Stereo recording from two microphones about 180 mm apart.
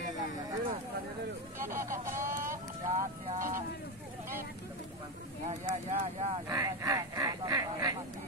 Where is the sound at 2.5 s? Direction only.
40° right (ahead or behind).